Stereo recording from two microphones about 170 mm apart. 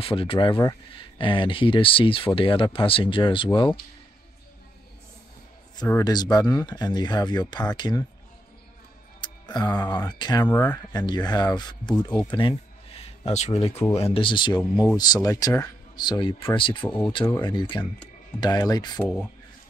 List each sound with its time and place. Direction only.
0.0 s speech: 30° left (ahead or behind)
5.9 s speech: 20° left (ahead or behind)
9.2 s speech: 25° left (ahead or behind)
16.8 s speech: 10° left (ahead or behind)
17.1 s speech: 25° left (ahead or behind)